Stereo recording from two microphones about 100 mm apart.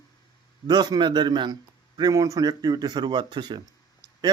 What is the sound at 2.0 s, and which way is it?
Speech, 35° right (ahead or behind).